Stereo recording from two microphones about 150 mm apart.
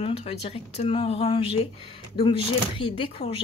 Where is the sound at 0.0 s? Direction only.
40° left (ahead or behind).